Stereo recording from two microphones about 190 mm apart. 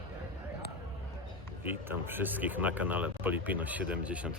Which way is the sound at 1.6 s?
10° right (ahead or behind).